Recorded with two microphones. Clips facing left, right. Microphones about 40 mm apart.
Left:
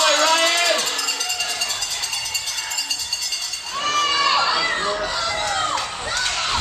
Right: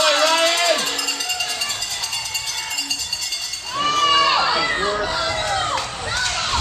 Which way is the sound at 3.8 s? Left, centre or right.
Centre.